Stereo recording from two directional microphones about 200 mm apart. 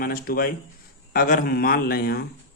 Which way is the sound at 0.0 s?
45° left (ahead or behind).